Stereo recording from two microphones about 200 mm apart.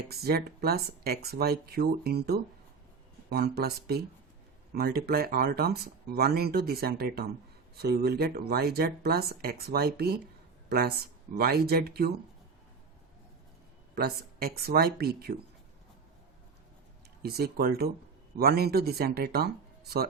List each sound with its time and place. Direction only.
0.1 s speech: 50° right (ahead or behind)
13.9 s speech: 50° right (ahead or behind)
17.2 s speech: 50° right (ahead or behind)